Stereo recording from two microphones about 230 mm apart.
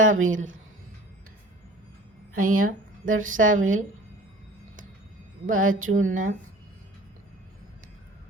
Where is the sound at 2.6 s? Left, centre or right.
Right.